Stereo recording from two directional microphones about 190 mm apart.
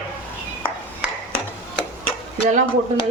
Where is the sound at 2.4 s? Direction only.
45° right (ahead or behind).